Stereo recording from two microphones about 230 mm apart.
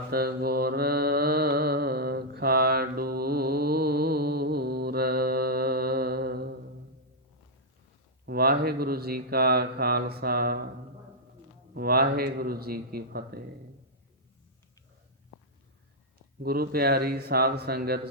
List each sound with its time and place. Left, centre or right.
0.1 s mantra: right
8.3 s speech: right
11.7 s speech: right
16.4 s speech: right